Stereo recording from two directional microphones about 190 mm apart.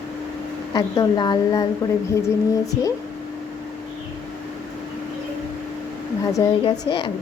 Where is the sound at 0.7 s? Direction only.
20° left (ahead or behind).